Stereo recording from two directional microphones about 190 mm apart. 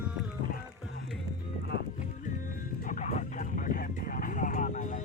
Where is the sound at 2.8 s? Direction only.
40° left (ahead or behind).